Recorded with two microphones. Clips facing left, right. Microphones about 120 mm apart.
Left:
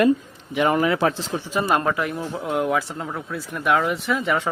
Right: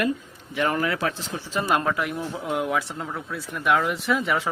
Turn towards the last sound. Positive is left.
turn(degrees=0)  # may be behind; listen again after turning